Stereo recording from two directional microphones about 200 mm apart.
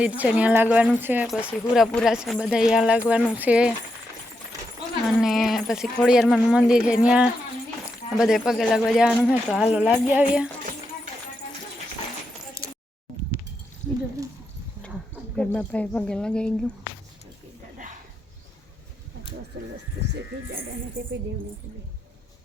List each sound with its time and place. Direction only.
0.0 s speech: 5° right (ahead or behind)
5.0 s speech: centre (ahead or behind)
15.4 s speech: 5° left (ahead or behind)